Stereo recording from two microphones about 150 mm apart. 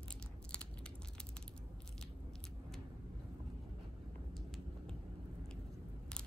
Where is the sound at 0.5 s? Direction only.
5° left (ahead or behind).